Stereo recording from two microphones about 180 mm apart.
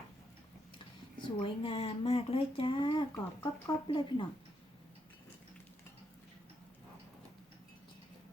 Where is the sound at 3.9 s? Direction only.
25° left (ahead or behind).